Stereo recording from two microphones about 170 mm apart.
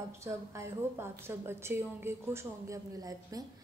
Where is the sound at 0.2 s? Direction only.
15° right (ahead or behind).